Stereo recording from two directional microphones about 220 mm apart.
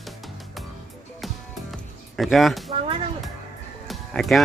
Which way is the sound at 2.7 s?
25° right (ahead or behind).